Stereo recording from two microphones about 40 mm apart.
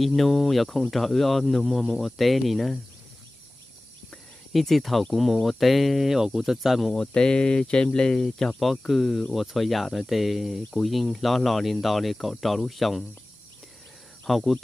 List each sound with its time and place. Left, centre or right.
0.0 s speech: centre
4.5 s speech: centre
6.0 s speech: centre
6.9 s speech: centre
8.5 s speech: centre
14.2 s speech: centre